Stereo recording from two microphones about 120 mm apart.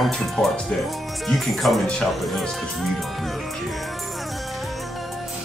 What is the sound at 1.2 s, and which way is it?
Speech, centre (ahead or behind).